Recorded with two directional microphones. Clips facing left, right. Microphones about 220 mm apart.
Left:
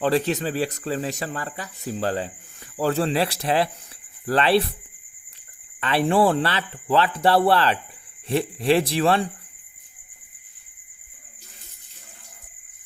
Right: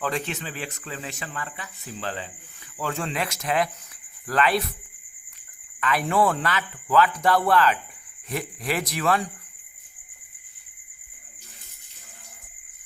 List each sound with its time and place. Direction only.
0.0 s speech: 35° left (ahead or behind)
5.8 s speech: 30° left (ahead or behind)